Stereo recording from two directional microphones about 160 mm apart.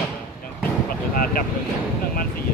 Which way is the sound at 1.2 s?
65° left (ahead or behind).